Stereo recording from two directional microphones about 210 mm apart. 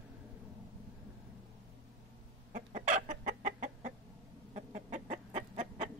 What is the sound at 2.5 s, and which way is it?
Chicken, 35° right (ahead or behind).